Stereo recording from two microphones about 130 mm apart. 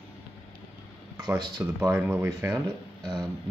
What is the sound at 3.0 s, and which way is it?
Speech, 30° right (ahead or behind).